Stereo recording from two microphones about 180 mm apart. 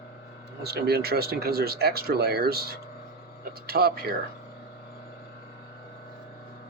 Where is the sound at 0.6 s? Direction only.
65° right (ahead or behind).